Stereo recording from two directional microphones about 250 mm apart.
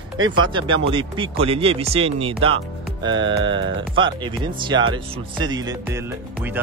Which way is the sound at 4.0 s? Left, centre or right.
Centre.